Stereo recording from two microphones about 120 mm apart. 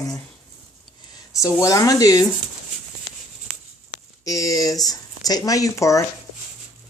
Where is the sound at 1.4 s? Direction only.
25° left (ahead or behind).